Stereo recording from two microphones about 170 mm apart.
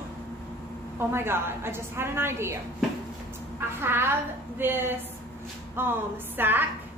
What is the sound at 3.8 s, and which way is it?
A woman's voice, 15° right (ahead or behind).